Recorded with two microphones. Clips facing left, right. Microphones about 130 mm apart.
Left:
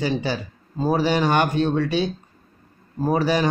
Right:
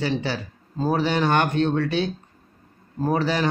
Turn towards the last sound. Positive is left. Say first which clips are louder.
# left 2 dB
turn(degrees=15)  # may be behind; listen again after turning